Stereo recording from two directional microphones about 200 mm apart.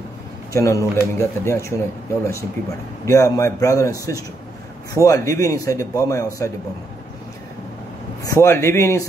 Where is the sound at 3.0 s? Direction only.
15° left (ahead or behind).